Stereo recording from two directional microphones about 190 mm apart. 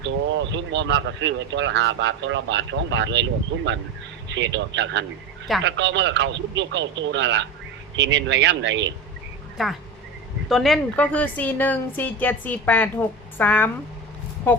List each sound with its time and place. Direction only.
0.0 s speech: 70° right (ahead or behind)
4.3 s speech: 70° right (ahead or behind)
9.6 s a woman's voice: centre (ahead or behind)